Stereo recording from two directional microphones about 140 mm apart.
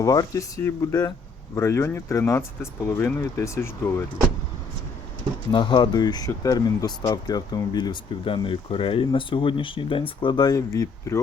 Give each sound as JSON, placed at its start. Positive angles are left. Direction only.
{"t": 0.0, "sound": "speech", "side_deg": 25}
{"t": 5.5, "sound": "speech", "side_deg": 35}